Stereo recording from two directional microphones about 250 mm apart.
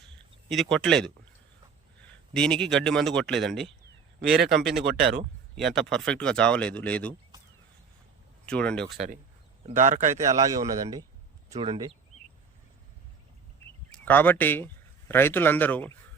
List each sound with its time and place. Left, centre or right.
0.4 s speech: centre
2.3 s speech: centre
8.4 s speech: centre
9.6 s a man's voice: right
10.2 s a man's voice: centre
14.0 s speech: centre